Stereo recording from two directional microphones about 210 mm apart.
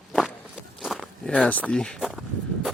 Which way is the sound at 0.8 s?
Centre (ahead or behind).